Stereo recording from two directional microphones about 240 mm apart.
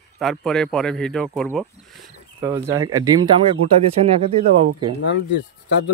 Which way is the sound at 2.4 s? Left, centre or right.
Centre.